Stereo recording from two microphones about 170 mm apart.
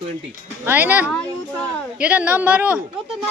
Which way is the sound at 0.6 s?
10° right (ahead or behind).